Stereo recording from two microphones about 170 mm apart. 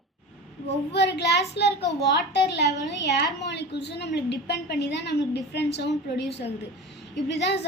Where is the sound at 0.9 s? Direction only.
85° left.